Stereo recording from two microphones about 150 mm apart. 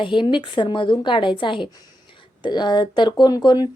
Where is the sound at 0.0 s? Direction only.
30° left (ahead or behind).